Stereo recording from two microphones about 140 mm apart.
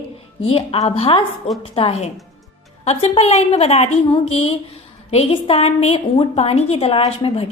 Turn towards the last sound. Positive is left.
turn(degrees=45)  # may be behind; listen again after turning